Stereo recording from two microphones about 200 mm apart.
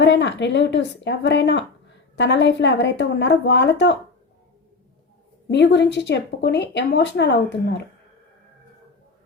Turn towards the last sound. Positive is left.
turn(degrees=60)  # may be behind; listen again after turning